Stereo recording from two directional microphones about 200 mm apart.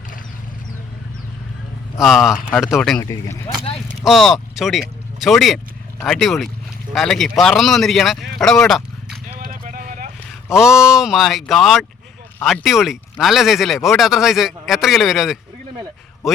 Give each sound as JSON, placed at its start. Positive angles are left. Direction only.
{"t": 2.0, "sound": "speech", "side_deg": 0}
{"t": 3.0, "sound": "speech", "side_deg": 15}
{"t": 4.0, "sound": "speech", "side_deg": 0}
{"t": 8.4, "sound": "a sound", "side_deg": 0}
{"t": 9.4, "sound": "a sound", "side_deg": -45}
{"t": 10.5, "sound": "speech", "side_deg": -5}